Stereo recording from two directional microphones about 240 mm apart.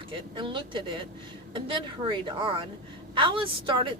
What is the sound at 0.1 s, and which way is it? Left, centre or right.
A woman's voice, right.